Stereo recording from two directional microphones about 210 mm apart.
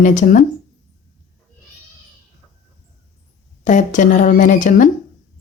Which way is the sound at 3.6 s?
35° left (ahead or behind).